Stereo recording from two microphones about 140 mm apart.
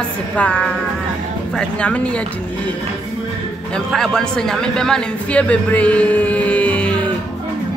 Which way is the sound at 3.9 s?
5° left (ahead or behind).